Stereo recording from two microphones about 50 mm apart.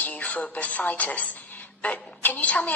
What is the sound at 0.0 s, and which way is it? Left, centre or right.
A woman's voice, left.